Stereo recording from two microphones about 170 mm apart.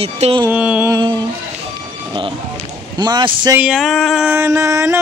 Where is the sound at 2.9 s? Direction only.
25° right (ahead or behind).